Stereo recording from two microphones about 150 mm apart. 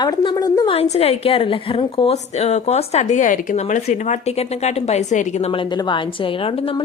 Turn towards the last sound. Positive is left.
turn(degrees=40)  # may be behind; listen again after turning